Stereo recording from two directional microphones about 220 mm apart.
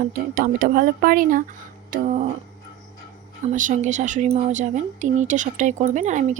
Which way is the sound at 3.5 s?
35° right (ahead or behind).